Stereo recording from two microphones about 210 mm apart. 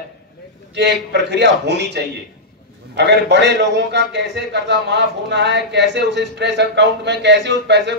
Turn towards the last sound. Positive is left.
turn(degrees=-55)  # may be behind; listen again after turning